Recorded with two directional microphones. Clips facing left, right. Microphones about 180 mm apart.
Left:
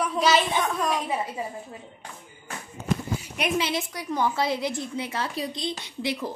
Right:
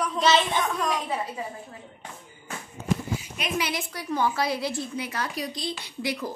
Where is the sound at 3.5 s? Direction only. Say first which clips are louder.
Right 1 dB; 25° left (ahead or behind).